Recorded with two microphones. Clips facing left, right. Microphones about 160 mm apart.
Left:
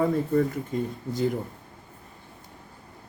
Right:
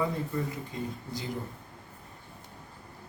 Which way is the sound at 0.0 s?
50° left (ahead or behind).